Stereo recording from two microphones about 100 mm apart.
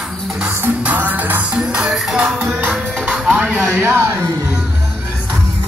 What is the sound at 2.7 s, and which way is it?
Music, 5° right (ahead or behind).